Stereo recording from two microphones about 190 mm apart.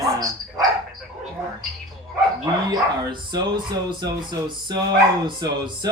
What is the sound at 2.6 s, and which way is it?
Speech, 25° right (ahead or behind).